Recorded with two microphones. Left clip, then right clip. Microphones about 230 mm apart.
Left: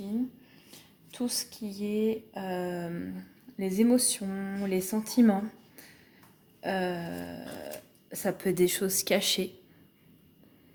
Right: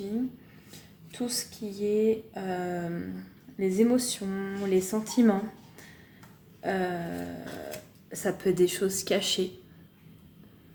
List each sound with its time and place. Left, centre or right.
1.1 s speech: left